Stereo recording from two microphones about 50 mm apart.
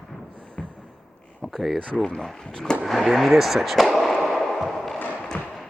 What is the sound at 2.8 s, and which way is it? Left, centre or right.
Speech, centre.